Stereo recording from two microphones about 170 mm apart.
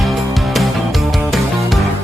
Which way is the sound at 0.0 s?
Centre (ahead or behind).